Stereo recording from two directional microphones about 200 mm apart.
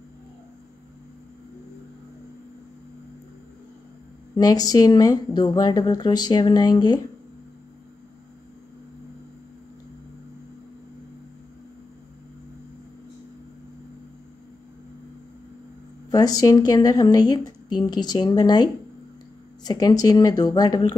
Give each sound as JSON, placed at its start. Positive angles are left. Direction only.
{"t": 4.4, "sound": "speech", "side_deg": 20}
{"t": 16.1, "sound": "speech", "side_deg": 20}